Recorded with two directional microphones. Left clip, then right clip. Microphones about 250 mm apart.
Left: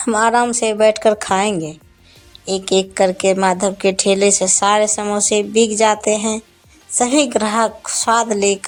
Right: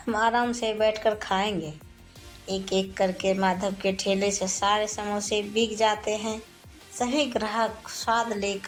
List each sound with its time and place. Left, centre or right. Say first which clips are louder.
0.0 s a woman's voice: left 10 dB; left